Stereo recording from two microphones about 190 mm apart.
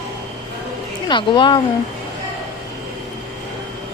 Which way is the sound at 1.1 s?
25° left (ahead or behind).